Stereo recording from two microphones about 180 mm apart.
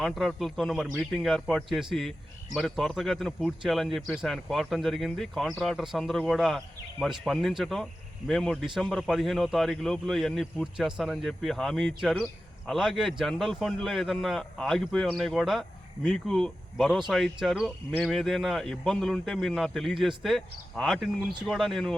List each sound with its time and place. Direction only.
0.0 s speech: centre (ahead or behind)